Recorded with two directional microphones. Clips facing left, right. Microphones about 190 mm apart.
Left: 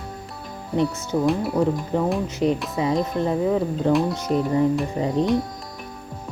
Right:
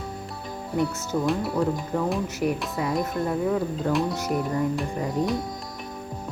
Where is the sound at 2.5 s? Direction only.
Centre (ahead or behind).